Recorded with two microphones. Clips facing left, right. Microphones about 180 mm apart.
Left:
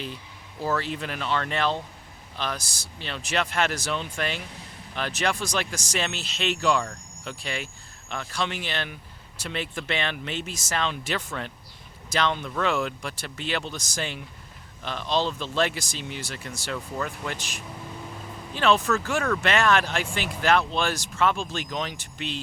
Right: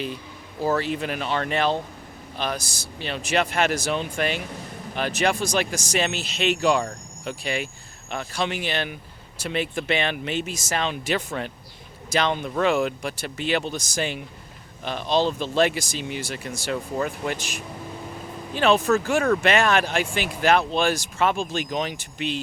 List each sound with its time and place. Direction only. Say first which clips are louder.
0.6 s speech: right 4 dB; 15° right (ahead or behind)
3.0 s speech: right 4 dB; 10° right (ahead or behind)
4.4 s speech: right 6 dB; 45° right (ahead or behind)
5.5 s speech: right 5 dB; 10° right (ahead or behind)
16.7 s speech: right 5 dB; 25° right (ahead or behind)
17.2 s speech: right 5 dB; 10° right (ahead or behind)